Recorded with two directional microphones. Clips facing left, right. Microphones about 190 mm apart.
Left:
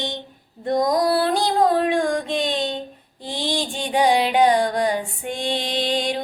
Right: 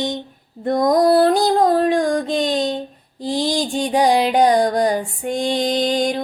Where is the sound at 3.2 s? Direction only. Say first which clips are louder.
Right 5 dB; 40° right (ahead or behind).